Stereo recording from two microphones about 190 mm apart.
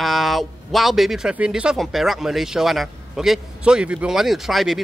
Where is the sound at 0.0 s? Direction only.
Centre (ahead or behind).